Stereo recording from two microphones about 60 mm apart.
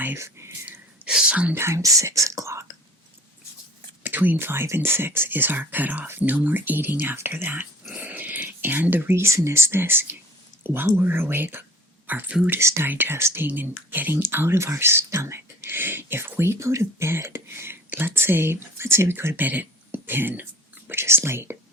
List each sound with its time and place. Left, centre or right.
0.2 s speech: right
1.0 s speech: centre
1.5 s speech: right
1.8 s speech: right
4.0 s whispering: right
4.4 s speech: right
7.9 s dog: right
8.4 s speech: right
12.5 s speech: right
12.9 s speech: right
13.1 s speech: right
13.5 s speech: right